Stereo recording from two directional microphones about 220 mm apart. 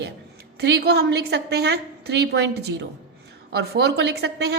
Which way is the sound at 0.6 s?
50° right (ahead or behind).